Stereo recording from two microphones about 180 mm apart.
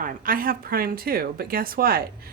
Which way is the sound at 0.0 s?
50° right (ahead or behind).